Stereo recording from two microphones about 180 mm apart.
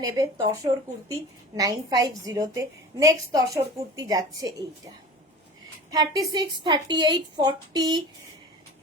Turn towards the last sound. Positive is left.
turn(degrees=-20)  # may be behind; listen again after turning